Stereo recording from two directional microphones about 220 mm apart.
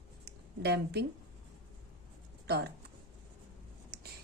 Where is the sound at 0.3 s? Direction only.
50° right (ahead or behind).